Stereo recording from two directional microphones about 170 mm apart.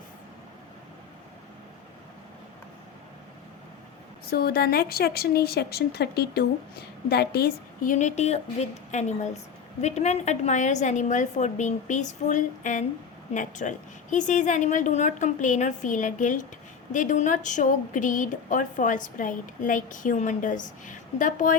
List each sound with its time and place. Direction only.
4.3 s a woman's voice: 65° left (ahead or behind); by 21.6 s 50° left (ahead or behind)